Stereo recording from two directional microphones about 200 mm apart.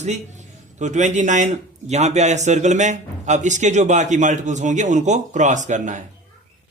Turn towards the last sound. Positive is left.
turn(degrees=-40)  # may be behind; listen again after turning